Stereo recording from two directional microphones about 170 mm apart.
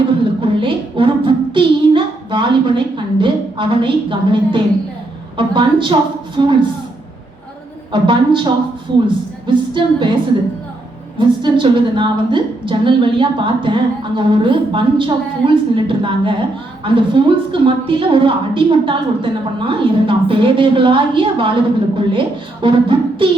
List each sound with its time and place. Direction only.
0.6 s child singing: 30° right (ahead or behind)
5.4 s a woman's voice: 30° right (ahead or behind)
7.9 s a woman's voice: 30° right (ahead or behind)
9.5 s a woman's voice: 25° right (ahead or behind)
11.2 s a woman's voice: 25° right (ahead or behind)